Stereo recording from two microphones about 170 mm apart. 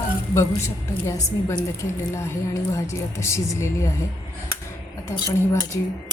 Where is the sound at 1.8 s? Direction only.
15° left (ahead or behind).